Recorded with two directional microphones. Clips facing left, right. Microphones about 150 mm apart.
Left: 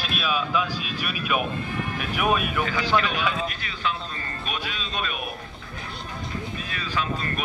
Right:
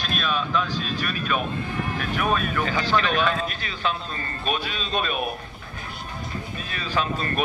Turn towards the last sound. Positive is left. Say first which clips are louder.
# right 3 dB
turn(degrees=-35)  # may be behind; listen again after turning